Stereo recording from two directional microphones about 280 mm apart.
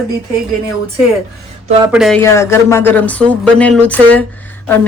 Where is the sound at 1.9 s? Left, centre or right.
Centre.